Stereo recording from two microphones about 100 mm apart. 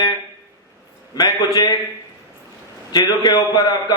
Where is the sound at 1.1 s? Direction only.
45° left (ahead or behind).